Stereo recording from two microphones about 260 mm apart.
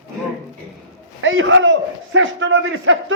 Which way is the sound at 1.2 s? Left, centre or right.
Right.